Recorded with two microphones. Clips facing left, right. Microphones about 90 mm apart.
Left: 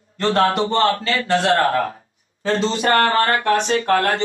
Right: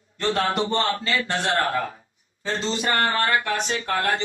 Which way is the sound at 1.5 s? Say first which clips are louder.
Left 6 dB; 60° left (ahead or behind).